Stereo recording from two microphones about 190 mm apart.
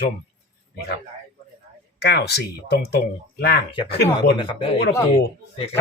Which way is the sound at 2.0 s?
60° left (ahead or behind).